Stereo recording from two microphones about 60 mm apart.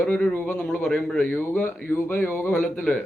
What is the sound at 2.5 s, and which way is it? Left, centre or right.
Speech, centre.